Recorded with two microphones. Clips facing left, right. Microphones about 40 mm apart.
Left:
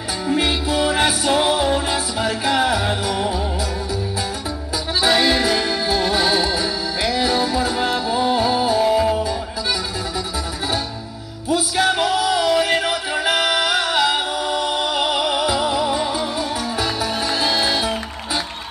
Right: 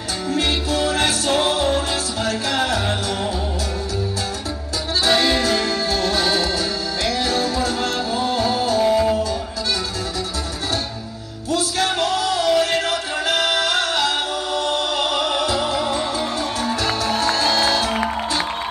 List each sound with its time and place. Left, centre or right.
0.3 s music: centre
5.0 s music: centre
11.4 s music: centre